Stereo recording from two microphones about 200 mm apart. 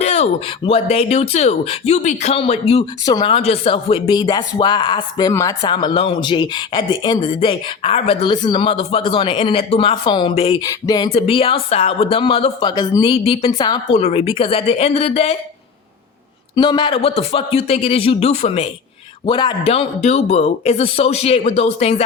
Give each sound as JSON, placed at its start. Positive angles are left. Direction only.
{"t": 0.0, "sound": "a sound", "side_deg": 35}
{"t": 0.6, "sound": "speech", "side_deg": 30}
{"t": 16.6, "sound": "speech", "side_deg": 20}